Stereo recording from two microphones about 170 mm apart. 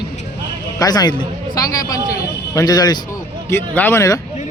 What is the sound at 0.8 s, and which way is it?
A man's voice, 25° left (ahead or behind).